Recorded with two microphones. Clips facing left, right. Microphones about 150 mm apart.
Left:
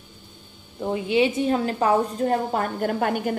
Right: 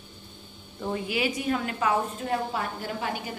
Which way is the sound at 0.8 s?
25° left (ahead or behind).